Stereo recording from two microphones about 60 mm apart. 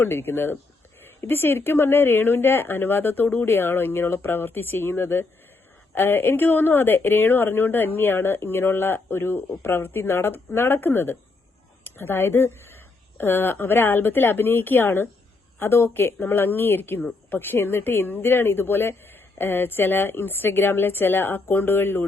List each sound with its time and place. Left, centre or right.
0.0 s a woman's voice: left